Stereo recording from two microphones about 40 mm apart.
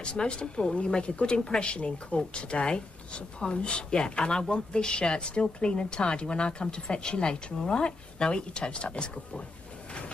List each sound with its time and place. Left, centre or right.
0.0 s a woman's voice: left